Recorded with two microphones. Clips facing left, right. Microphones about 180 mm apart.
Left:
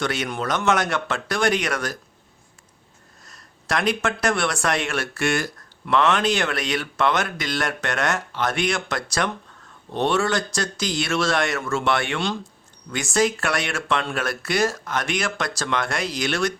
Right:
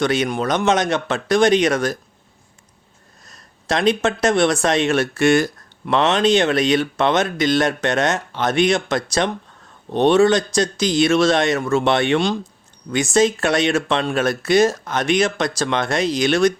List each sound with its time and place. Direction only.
0.0 s speech: 20° right (ahead or behind)
3.2 s speech: 20° right (ahead or behind)